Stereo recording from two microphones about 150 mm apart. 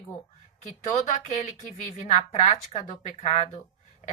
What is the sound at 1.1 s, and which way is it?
Speech, 55° left (ahead or behind).